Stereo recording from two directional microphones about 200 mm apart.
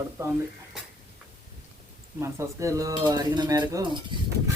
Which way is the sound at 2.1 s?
15° right (ahead or behind).